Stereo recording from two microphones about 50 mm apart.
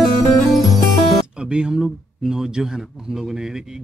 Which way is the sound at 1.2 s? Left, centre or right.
Centre.